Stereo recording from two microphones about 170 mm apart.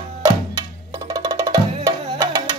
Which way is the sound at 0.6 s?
20° right (ahead or behind).